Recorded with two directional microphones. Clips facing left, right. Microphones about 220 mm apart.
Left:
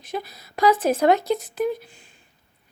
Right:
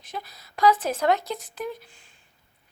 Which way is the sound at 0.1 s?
5° left (ahead or behind).